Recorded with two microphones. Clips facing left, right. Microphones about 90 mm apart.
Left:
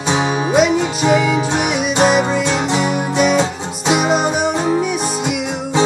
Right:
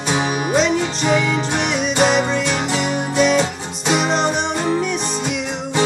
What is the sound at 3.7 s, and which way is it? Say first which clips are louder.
Music: left 3 dB; 5° left (ahead or behind).